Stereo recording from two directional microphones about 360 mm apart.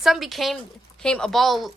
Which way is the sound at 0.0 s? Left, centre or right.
Centre.